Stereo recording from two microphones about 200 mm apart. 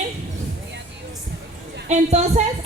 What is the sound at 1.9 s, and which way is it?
Speech, 35° right (ahead or behind).